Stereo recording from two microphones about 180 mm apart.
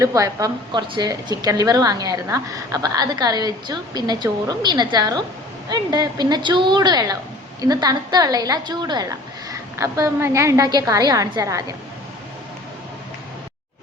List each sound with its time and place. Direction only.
0.0 s a woman's voice: 20° right (ahead or behind)